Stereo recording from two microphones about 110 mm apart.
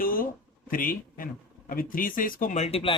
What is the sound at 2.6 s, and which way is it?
Speech, 70° left (ahead or behind).